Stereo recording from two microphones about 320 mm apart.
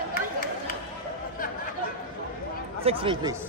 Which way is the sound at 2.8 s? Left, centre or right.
Centre.